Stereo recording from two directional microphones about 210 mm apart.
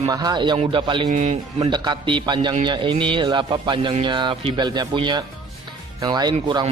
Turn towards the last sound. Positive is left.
turn(degrees=-20)  # may be behind; listen again after turning